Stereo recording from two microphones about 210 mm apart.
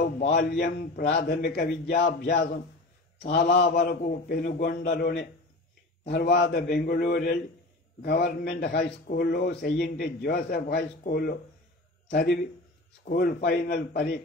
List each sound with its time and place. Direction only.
0.3 s a man's voice: 50° left (ahead or behind)